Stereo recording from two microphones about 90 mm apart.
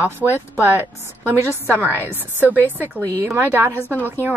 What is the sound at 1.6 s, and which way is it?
Speech, 25° right (ahead or behind).